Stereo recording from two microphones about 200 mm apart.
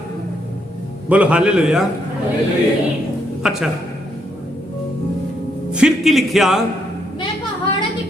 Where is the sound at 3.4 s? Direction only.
Centre (ahead or behind).